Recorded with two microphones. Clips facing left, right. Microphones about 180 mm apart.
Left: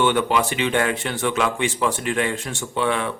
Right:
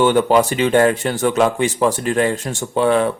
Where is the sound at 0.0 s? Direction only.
40° right (ahead or behind).